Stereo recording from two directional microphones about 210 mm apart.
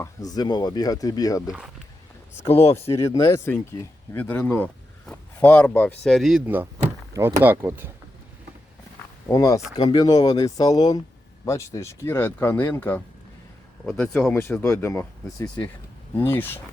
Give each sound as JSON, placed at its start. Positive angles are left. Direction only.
{"t": 0.0, "sound": "speech", "side_deg": 15}
{"t": 1.5, "sound": "speech", "side_deg": -5}
{"t": 2.5, "sound": "speech", "side_deg": 30}
{"t": 2.9, "sound": "speech", "side_deg": 15}
{"t": 9.3, "sound": "speech", "side_deg": 15}